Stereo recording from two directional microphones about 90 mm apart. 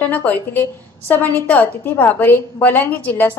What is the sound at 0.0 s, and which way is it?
A woman's voice, 20° left (ahead or behind).